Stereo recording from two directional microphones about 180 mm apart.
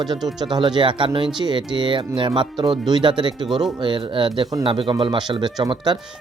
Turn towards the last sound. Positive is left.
turn(degrees=-25)  # may be behind; listen again after turning